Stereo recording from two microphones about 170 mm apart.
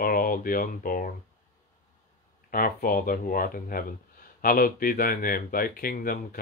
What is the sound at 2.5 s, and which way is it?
Speech, 55° left (ahead or behind).